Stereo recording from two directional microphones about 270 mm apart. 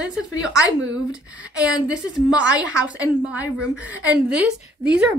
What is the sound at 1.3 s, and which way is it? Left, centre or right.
A woman's voice, centre.